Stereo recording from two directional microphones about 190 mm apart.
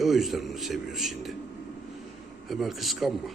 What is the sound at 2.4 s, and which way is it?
Speech, centre (ahead or behind).